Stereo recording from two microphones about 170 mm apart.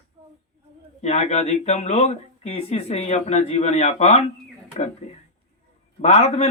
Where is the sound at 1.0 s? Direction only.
40° left (ahead or behind).